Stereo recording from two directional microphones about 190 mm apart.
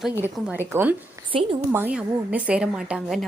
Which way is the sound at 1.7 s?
10° right (ahead or behind).